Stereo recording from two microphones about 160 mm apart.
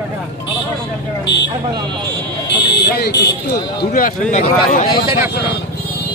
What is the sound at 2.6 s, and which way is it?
Speech, 90° left.